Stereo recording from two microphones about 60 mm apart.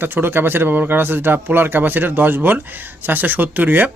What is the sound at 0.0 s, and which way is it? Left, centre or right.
Speech, right.